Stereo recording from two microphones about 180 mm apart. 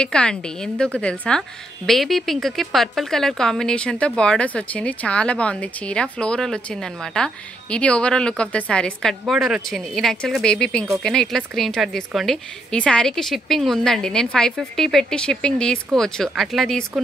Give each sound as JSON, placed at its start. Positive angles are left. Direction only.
{"t": 0.0, "sound": "speech", "side_deg": 5}